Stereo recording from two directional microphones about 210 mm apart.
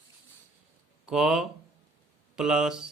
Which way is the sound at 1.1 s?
Centre (ahead or behind).